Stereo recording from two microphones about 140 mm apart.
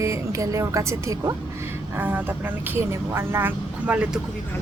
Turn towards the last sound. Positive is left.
turn(degrees=-10)  # may be behind; listen again after turning